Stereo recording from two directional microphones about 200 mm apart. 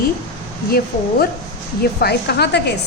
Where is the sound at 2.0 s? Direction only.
55° left (ahead or behind).